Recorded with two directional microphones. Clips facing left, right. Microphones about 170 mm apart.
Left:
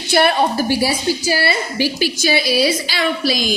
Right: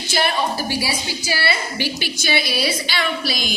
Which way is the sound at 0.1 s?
55° left (ahead or behind).